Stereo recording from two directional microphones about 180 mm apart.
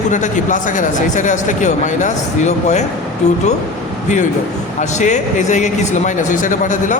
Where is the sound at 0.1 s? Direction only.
45° left (ahead or behind).